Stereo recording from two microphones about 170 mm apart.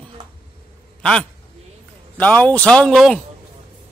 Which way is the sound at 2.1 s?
10° left (ahead or behind).